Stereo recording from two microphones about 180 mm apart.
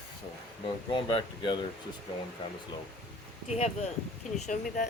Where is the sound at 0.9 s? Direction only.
25° left (ahead or behind).